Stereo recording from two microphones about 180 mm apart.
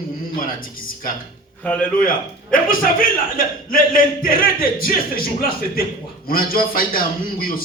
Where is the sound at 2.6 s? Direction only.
50° left (ahead or behind).